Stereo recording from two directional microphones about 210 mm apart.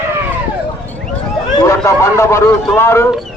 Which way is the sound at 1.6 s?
15° left (ahead or behind).